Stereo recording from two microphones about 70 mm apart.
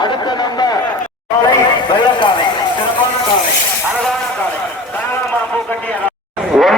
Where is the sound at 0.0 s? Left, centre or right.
Left.